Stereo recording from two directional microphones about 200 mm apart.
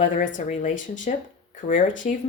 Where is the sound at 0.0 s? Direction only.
40° left (ahead or behind).